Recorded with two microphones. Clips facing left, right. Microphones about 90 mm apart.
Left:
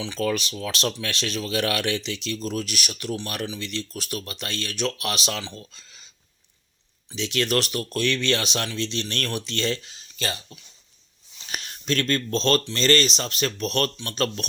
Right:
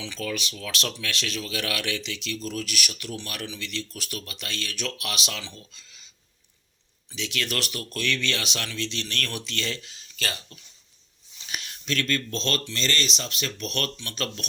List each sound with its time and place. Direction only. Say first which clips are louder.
0.0 s speech: left 6 dB; 30° left (ahead or behind)
0.5 s speech: left 5 dB; 30° left (ahead or behind)
5.5 s speech: left 5 dB; 45° left (ahead or behind)
7.2 s speech: left 6 dB; 30° left (ahead or behind)
11.4 s speech: left 4 dB; 40° left (ahead or behind)